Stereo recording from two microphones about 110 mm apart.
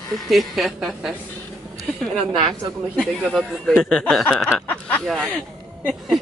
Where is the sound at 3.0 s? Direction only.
Centre (ahead or behind).